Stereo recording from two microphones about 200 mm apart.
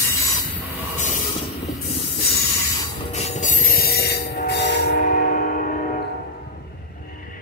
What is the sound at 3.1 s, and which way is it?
Train wheels squealing, 40° left (ahead or behind).